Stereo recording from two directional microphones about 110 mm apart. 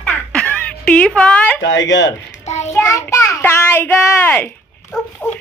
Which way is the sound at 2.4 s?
90° left.